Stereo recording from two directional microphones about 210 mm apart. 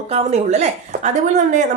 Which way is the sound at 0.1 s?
30° right (ahead or behind).